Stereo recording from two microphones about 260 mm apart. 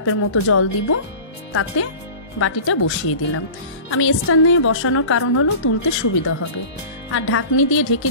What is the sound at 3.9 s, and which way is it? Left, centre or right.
A woman's voice, left.